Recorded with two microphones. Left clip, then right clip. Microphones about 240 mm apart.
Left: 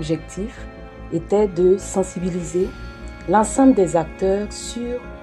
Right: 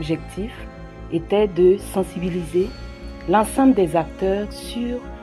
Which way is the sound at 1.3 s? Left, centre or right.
Right.